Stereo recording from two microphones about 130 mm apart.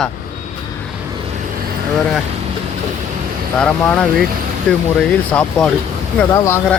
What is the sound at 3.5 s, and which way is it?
A man's voice, 10° left (ahead or behind).